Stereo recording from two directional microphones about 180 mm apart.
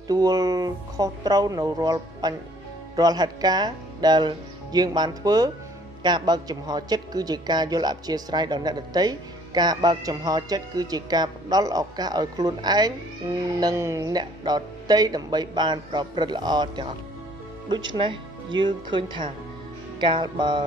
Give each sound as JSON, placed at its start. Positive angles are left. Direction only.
{"t": 0.1, "sound": "a man's voice", "side_deg": -20}